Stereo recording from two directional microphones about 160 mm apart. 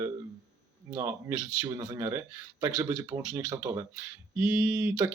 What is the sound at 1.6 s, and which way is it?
Speech, 25° right (ahead or behind).